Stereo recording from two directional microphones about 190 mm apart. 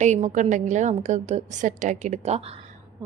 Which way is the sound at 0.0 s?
40° right (ahead or behind).